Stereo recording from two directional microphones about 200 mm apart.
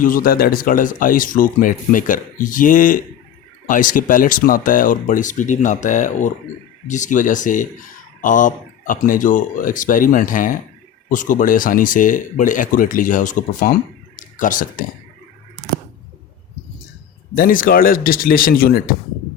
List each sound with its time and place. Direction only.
0.0 s speech: 45° left (ahead or behind)
17.3 s speech: 45° left (ahead or behind)